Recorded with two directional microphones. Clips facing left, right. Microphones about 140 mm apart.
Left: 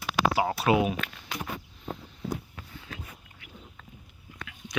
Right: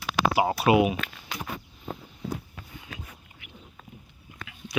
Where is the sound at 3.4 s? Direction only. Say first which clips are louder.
Left 1 dB; 20° right (ahead or behind).